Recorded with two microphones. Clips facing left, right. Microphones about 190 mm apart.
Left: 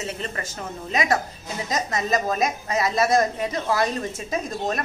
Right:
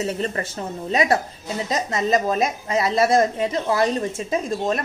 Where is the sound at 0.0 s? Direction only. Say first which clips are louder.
Right 6 dB; 35° right (ahead or behind).